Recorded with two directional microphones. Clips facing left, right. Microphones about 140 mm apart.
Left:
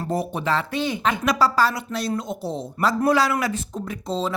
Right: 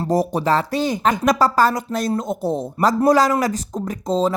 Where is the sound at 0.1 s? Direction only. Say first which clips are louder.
Right 6 dB; 40° right (ahead or behind).